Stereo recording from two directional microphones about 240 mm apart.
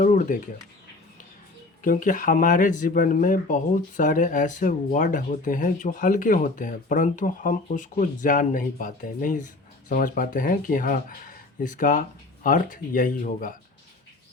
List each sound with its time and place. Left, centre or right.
0.0 s speech: left
1.8 s speech: left